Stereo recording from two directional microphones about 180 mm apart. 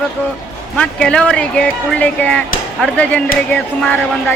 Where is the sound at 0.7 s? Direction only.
5° left (ahead or behind).